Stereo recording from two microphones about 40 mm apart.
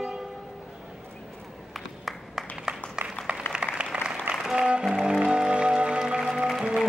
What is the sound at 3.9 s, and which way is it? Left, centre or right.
Applause, right.